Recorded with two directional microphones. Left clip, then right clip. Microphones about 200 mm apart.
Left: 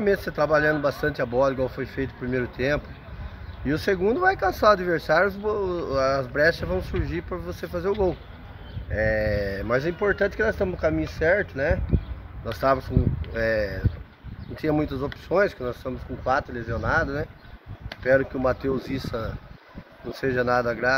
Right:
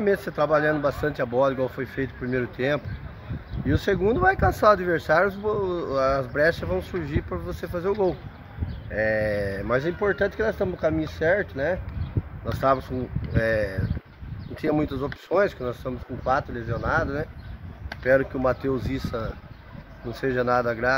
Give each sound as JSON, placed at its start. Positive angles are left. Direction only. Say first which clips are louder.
{"t": 0.0, "sound": "speech", "louder": "even", "side_deg": 5}